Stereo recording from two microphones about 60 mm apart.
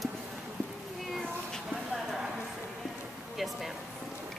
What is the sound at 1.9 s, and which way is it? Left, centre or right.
Clip-clop, centre.